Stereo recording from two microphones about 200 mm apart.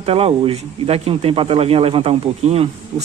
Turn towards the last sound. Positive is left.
turn(degrees=-30)  # may be behind; listen again after turning